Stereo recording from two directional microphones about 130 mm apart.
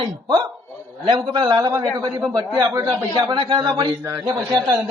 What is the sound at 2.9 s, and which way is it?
A man's voice, 35° right (ahead or behind).